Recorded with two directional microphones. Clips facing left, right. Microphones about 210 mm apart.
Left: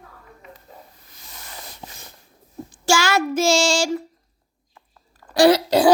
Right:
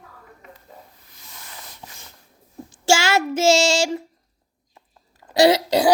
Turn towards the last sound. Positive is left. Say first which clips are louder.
# left 1 dB
turn(degrees=-20)  # may be behind; listen again after turning